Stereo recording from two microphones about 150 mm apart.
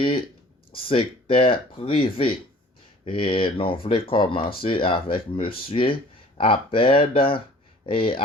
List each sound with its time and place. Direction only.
0.7 s speech: 35° left (ahead or behind)